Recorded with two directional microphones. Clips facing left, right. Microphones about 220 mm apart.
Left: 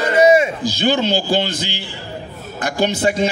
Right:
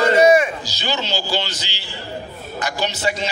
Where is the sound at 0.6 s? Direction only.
55° left (ahead or behind).